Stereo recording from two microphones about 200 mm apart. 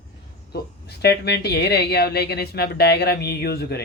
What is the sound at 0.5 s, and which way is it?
Speech, 55° left (ahead or behind).